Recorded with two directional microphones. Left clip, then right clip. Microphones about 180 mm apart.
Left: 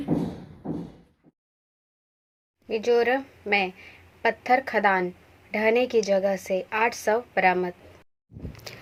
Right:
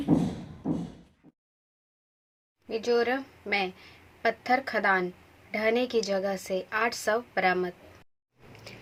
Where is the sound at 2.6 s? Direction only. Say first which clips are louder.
Left 4 dB; 15° right (ahead or behind).